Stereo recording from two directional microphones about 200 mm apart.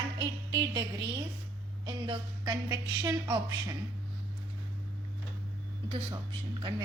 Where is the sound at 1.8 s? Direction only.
20° right (ahead or behind).